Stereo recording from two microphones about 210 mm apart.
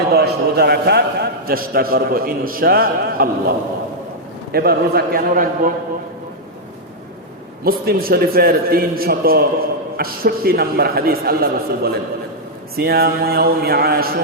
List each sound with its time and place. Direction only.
0.1 s a man's voice: 50° right (ahead or behind)
4.5 s a man's voice: 45° right (ahead or behind)
7.6 s a man's voice: 45° right (ahead or behind)